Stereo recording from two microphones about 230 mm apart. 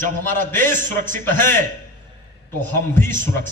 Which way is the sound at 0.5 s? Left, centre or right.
Centre.